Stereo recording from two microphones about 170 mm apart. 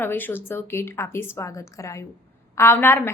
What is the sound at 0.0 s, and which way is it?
A woman's voice, 10° left (ahead or behind).